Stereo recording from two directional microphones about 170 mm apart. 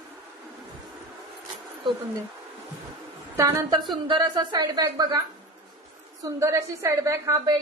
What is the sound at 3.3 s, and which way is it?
A woman's voice, 15° right (ahead or behind).